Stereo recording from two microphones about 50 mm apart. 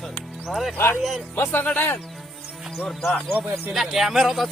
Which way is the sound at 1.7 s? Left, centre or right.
Left.